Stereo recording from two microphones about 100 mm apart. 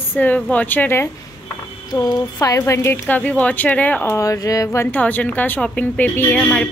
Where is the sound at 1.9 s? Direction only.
40° left (ahead or behind); by 4.1 s 15° left (ahead or behind).